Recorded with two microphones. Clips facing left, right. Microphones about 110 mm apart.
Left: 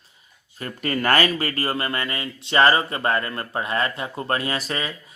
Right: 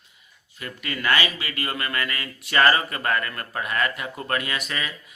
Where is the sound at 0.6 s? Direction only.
40° left (ahead or behind).